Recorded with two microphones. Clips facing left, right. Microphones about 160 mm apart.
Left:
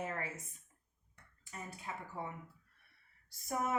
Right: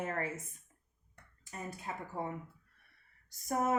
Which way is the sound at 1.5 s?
40° right (ahead or behind).